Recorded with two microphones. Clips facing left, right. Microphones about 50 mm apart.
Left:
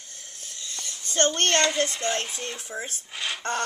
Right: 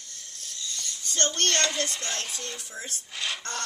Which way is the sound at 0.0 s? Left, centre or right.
Left.